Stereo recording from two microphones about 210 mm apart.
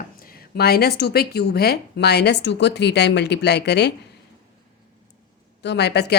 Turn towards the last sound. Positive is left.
turn(degrees=50)  # may be behind; listen again after turning